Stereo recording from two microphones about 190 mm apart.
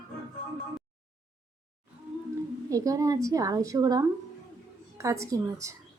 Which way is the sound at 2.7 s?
20° right (ahead or behind).